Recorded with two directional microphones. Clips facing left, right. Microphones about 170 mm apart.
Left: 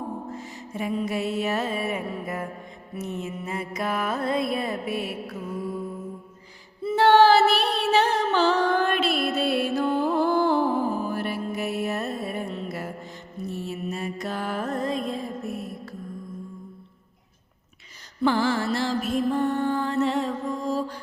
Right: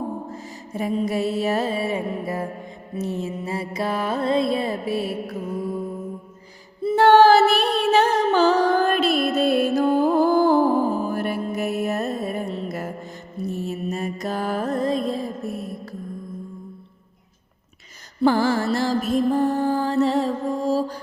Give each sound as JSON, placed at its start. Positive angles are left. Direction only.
{"t": 0.3, "sound": "music", "side_deg": -40}
{"t": 6.8, "sound": "music", "side_deg": -45}
{"t": 18.2, "sound": "mantra", "side_deg": -45}